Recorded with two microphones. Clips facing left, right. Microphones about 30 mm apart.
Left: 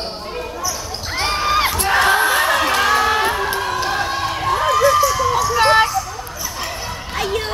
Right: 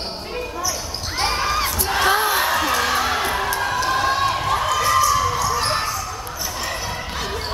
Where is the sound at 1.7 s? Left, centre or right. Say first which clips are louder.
Left 5 dB; left.